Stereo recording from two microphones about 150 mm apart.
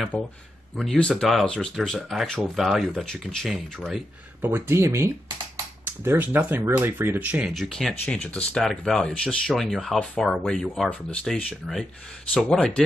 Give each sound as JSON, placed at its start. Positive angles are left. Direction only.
{"t": 0.1, "sound": "speech", "side_deg": 5}
{"t": 4.4, "sound": "speech", "side_deg": -15}